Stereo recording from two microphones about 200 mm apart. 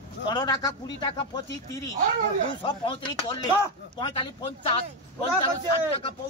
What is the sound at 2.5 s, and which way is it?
A man's voice, 25° left (ahead or behind).